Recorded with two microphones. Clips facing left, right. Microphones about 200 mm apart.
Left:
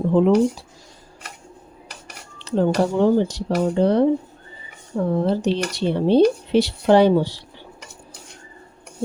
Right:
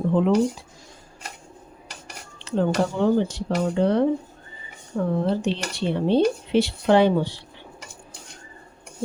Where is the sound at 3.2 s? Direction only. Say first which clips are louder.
Left 3 dB; 40° left (ahead or behind).